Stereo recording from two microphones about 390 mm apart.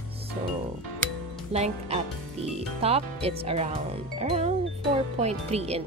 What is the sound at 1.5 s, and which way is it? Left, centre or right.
Speech, centre.